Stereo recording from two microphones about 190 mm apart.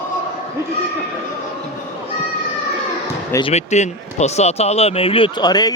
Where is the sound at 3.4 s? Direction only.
30° left (ahead or behind).